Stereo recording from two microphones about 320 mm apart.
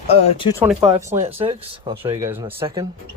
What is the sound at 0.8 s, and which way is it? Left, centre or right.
Speech, centre.